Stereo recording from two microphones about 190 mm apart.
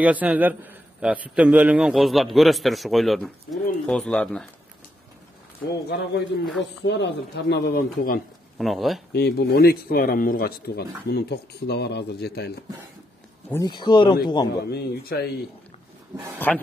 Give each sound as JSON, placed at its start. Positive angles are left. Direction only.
{"t": 0.0, "sound": "a man's voice", "side_deg": -10}
{"t": 5.9, "sound": "speech", "side_deg": 55}
{"t": 8.5, "sound": "a man's voice", "side_deg": 0}
{"t": 9.1, "sound": "speech", "side_deg": 60}
{"t": 13.5, "sound": "speech", "side_deg": 20}
{"t": 14.6, "sound": "speech", "side_deg": 60}
{"t": 16.5, "sound": "a man's voice", "side_deg": 5}